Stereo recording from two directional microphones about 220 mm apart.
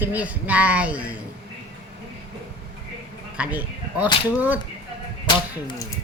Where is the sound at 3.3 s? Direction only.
5° right (ahead or behind).